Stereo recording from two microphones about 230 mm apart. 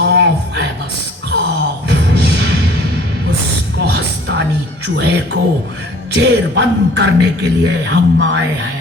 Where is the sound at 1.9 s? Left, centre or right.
Right.